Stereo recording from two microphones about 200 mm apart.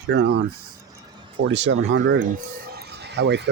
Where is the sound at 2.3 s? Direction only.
50° right (ahead or behind).